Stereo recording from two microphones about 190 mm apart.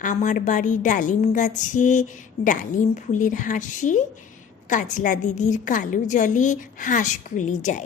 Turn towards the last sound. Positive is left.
turn(degrees=40)  # may be behind; listen again after turning